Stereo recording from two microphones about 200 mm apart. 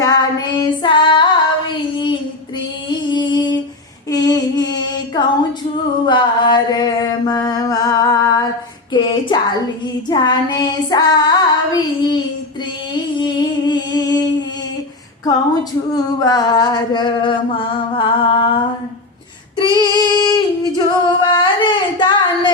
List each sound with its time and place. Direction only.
0.0 s child singing: 20° left (ahead or behind)
1.7 s a sound: 25° left (ahead or behind)
4.1 s female singing: 20° left (ahead or behind)
6.1 s mantra: 25° left (ahead or behind)
8.9 s a sound: 25° left (ahead or behind)
10.1 s child singing: 20° left (ahead or behind)
12.9 s humming: 20° left (ahead or behind)
15.9 s a sound: 20° left (ahead or behind)
19.5 s female singing: 20° left (ahead or behind)